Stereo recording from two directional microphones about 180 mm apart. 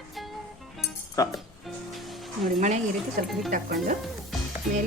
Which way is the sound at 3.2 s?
50° right (ahead or behind).